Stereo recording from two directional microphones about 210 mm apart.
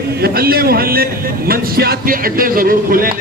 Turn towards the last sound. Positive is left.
turn(degrees=-45)  # may be behind; listen again after turning